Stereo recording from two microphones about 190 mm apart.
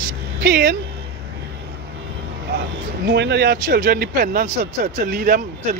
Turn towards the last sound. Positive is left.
turn(degrees=-50)  # may be behind; listen again after turning